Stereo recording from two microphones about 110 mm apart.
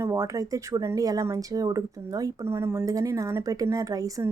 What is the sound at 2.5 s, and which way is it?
Speech, 25° right (ahead or behind).